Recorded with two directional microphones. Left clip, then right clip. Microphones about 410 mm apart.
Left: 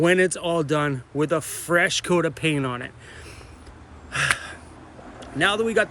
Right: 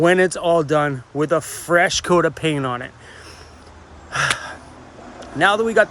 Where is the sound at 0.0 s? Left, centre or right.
Centre.